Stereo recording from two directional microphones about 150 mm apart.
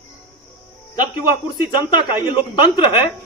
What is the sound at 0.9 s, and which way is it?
A man's voice, 30° left (ahead or behind).